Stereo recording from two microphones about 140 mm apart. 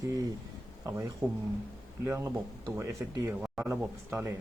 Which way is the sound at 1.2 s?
5° right (ahead or behind).